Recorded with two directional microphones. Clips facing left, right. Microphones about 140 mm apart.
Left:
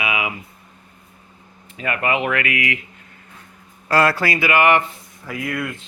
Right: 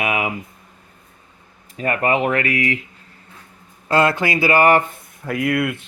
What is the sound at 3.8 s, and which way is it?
Speech, 20° right (ahead or behind).